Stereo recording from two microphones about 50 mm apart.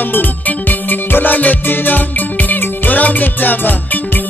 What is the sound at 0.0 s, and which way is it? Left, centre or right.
Music, left.